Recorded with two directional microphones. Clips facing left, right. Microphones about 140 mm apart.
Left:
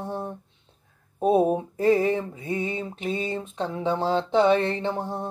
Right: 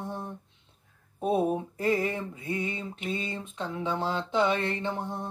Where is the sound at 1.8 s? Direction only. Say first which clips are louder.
Left 7 dB; 30° left (ahead or behind).